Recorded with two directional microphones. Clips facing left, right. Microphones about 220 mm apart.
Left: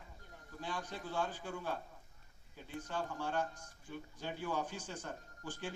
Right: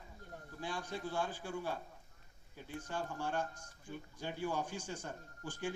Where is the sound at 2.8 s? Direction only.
10° right (ahead or behind).